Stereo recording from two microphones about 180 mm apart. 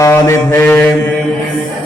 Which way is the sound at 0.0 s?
15° left (ahead or behind).